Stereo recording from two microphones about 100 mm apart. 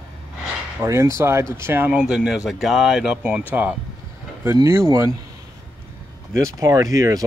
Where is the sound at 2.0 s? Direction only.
5° right (ahead or behind).